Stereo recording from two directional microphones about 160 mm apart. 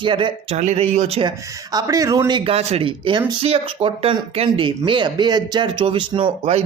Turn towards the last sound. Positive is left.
turn(degrees=-35)  # may be behind; listen again after turning